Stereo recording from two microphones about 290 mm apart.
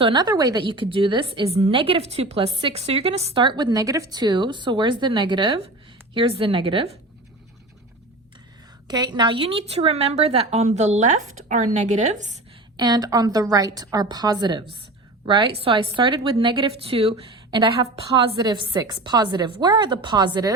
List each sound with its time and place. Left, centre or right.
0.0 s a woman's voice: centre
8.9 s a woman's voice: centre
12.7 s a woman's voice: centre